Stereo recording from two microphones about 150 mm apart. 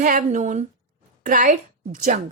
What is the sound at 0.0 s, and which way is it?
A woman's voice, 60° right (ahead or behind).